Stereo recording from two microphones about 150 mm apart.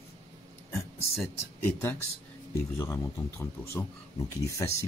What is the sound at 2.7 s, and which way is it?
Speech, 20° left (ahead or behind).